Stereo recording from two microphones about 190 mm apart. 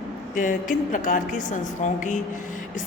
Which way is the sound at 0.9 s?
45° left (ahead or behind).